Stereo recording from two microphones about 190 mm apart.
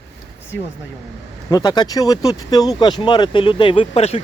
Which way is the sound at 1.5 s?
20° left (ahead or behind).